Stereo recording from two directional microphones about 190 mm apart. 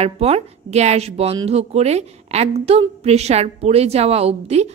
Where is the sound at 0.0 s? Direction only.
35° right (ahead or behind).